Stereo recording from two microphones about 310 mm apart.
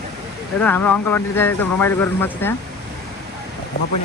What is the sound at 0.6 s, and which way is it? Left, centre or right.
Speech, centre.